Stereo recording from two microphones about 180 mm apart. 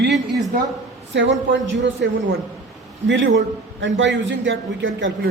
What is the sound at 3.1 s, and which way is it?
A man's voice, 85° right.